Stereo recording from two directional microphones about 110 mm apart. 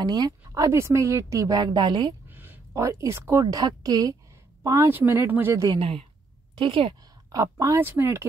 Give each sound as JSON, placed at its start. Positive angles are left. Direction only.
{"t": 0.0, "sound": "a woman's voice", "side_deg": -35}
{"t": 2.2, "sound": "a sound", "side_deg": -15}
{"t": 2.7, "sound": "a woman's voice", "side_deg": -30}
{"t": 4.6, "sound": "speech", "side_deg": -25}
{"t": 5.8, "sound": "a woman's voice", "side_deg": -60}
{"t": 7.3, "sound": "speech", "side_deg": -30}